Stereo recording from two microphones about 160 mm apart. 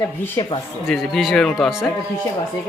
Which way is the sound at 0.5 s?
35° left (ahead or behind).